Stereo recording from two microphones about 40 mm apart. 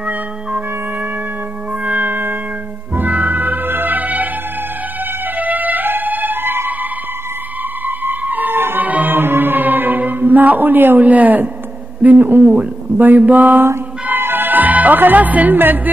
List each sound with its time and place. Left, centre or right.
1.9 s music: right
5.4 s music: right
7.8 s a sound: right
8.5 s music: right
8.8 s music: right
9.1 s chant: right
11.0 s a woman's voice: right
12.3 s speech: right
12.5 s music: right